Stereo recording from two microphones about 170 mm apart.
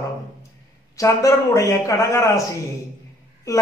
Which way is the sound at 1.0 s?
20° left (ahead or behind).